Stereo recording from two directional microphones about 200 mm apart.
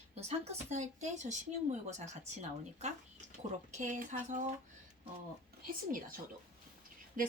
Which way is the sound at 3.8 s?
40° right (ahead or behind).